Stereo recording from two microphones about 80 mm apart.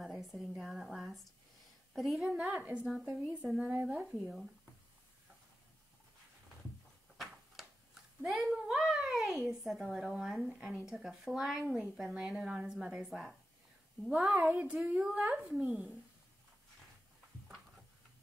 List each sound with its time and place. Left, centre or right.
0.0 s a sound: centre
0.6 s a woman's voice: centre
8.2 s a child's voice: centre
14.4 s a woman's voice: centre
15.0 s a woman's voice: centre